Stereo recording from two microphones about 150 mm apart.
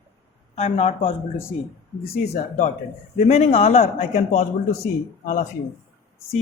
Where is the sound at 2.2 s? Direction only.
45° left (ahead or behind).